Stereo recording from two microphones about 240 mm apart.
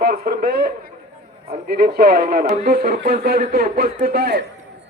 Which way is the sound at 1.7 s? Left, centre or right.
Right.